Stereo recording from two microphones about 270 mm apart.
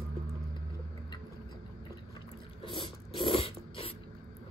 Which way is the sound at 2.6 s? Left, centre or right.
Centre.